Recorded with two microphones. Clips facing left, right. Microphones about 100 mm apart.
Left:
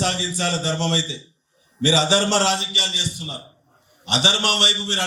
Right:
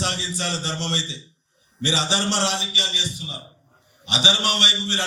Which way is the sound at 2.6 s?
55° left (ahead or behind).